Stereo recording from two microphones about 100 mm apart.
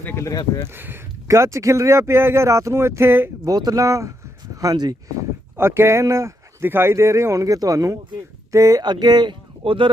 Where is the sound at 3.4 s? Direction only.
40° right (ahead or behind).